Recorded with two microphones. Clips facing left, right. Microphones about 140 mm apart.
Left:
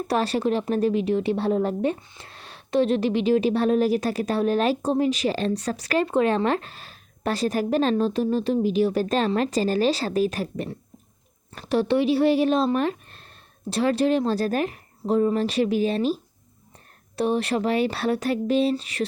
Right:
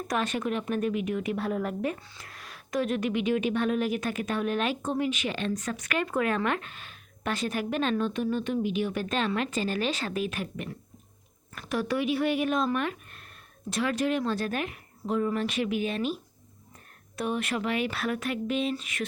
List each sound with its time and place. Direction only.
0.1 s a woman's voice: 35° left (ahead or behind)